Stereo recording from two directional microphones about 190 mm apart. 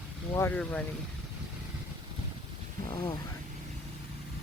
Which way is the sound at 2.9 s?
25° left (ahead or behind).